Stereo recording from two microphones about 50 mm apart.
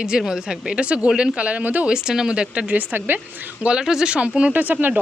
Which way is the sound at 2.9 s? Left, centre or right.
Right.